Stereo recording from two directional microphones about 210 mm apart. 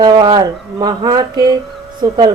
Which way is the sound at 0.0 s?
20° right (ahead or behind).